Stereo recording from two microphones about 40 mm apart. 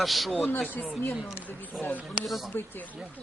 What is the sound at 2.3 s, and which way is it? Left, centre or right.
Speech, centre.